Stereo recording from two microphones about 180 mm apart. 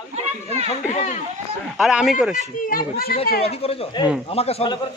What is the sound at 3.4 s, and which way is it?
Speech, 35° left (ahead or behind).